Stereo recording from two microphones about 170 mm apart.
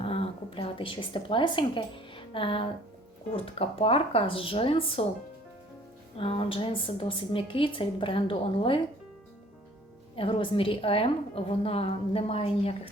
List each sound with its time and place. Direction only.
0.0 s a woman's voice: 35° left (ahead or behind)
6.1 s a woman's voice: 30° left (ahead or behind)
10.2 s a woman's voice: 30° left (ahead or behind)